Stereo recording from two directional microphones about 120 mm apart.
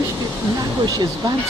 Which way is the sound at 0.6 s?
35° right (ahead or behind).